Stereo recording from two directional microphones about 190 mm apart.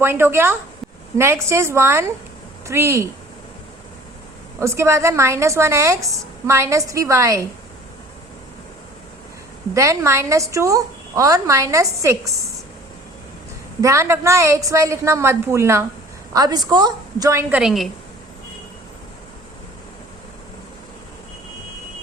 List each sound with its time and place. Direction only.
0.0 s a woman's voice: 10° right (ahead or behind)
4.6 s a woman's voice: 15° right (ahead or behind)
9.7 s a woman's voice: 15° right (ahead or behind)
13.8 s a woman's voice: 15° right (ahead or behind)
17.6 s a woman's voice: centre (ahead or behind)